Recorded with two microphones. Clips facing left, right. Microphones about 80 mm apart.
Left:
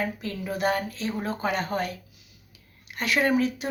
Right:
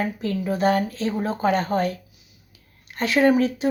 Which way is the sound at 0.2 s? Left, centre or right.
Right.